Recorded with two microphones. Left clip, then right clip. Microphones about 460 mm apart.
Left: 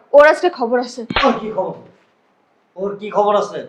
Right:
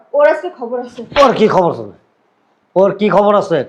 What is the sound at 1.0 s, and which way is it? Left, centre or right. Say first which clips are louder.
Speech: left 1 dB; left.